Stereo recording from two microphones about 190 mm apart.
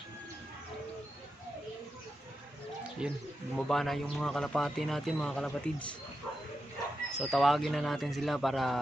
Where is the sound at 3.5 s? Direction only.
5° left (ahead or behind).